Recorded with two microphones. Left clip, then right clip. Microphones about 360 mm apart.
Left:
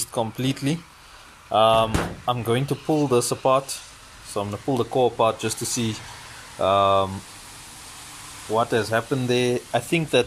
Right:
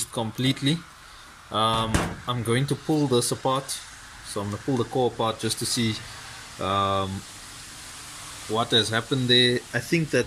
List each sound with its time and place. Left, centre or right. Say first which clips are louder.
0.0 s speech: left 2 dB; centre
5.5 s speech: right 1 dB; centre
6.6 s speech: left 6 dB; centre
8.5 s speech: left 1 dB; centre
9.3 s speech: right 3 dB; left
9.7 s speech: left 3 dB; centre